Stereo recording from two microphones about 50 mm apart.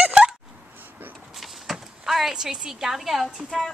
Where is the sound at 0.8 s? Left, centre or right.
Right.